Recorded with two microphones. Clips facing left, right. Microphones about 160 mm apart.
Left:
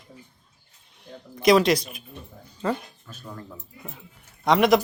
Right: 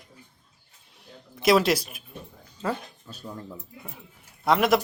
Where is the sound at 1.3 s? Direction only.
5° right (ahead or behind).